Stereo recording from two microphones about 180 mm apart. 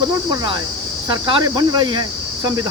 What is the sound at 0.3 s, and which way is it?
Speech, 25° right (ahead or behind).